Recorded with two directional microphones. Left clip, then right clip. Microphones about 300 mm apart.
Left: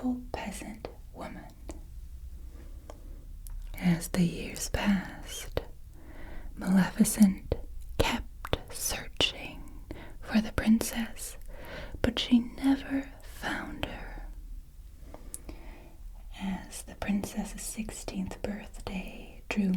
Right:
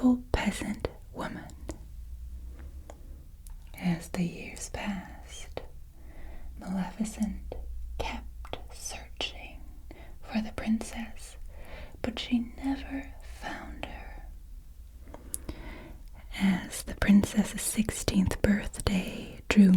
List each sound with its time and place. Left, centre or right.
0.0 s whispering: right
3.7 s whispering: centre
15.3 s a sound: right
16.3 s whispering: right